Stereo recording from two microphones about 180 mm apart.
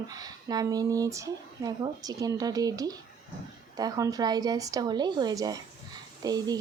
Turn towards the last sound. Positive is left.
turn(degrees=-20)  # may be behind; listen again after turning